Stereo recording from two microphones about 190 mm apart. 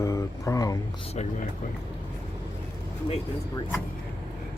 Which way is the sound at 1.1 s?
35° left (ahead or behind).